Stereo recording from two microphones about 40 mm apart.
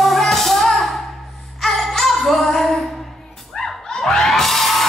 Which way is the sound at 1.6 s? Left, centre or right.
Centre.